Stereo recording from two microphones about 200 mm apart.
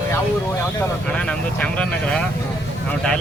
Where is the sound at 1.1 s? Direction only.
5° left (ahead or behind).